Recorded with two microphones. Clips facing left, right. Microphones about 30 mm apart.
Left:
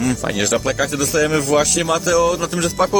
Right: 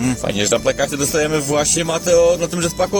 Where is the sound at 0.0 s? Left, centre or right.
Centre.